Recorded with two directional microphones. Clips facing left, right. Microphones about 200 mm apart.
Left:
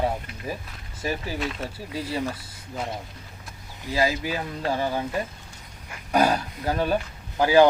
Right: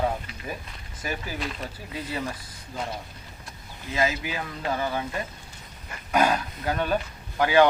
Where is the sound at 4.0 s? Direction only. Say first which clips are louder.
Left 2 dB; 35° left (ahead or behind).